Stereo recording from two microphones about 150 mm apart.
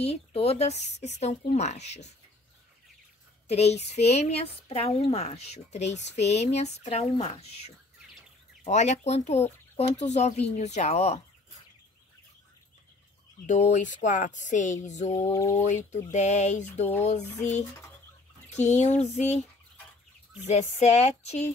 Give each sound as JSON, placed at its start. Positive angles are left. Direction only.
{"t": 0.0, "sound": "speech", "side_deg": 45}
{"t": 3.4, "sound": "speech", "side_deg": 45}
{"t": 13.5, "sound": "speech", "side_deg": 55}
{"t": 15.2, "sound": "a sound", "side_deg": 20}
{"t": 15.5, "sound": "speech", "side_deg": 50}
{"t": 20.4, "sound": "speech", "side_deg": 50}